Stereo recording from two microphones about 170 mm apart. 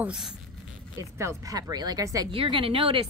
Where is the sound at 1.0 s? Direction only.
15° right (ahead or behind).